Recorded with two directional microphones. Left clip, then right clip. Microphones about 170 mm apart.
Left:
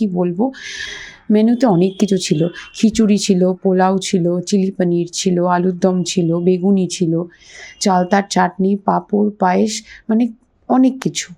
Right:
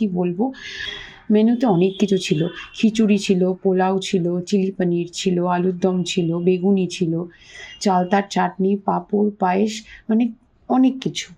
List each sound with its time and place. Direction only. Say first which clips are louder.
0.0 s speech: left 4 dB; 30° left (ahead or behind)